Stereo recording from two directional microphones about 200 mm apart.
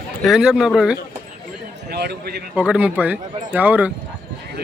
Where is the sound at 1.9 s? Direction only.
55° right (ahead or behind).